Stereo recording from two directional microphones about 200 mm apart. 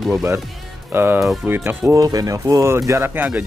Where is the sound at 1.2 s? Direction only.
5° right (ahead or behind).